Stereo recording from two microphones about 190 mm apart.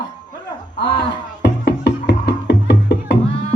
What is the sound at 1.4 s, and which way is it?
Music, 60° left (ahead or behind).